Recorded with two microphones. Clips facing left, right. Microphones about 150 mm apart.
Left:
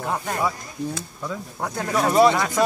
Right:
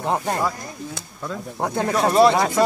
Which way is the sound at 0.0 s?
25° right (ahead or behind).